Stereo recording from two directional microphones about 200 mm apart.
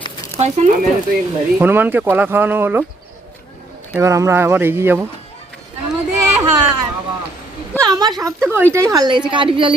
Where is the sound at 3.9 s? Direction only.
15° right (ahead or behind).